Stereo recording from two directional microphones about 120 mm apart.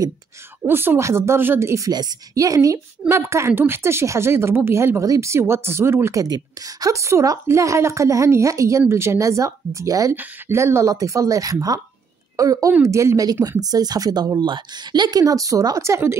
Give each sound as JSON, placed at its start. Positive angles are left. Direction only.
{"t": 0.7, "sound": "a woman's voice", "side_deg": -20}
{"t": 6.2, "sound": "a woman's voice", "side_deg": -30}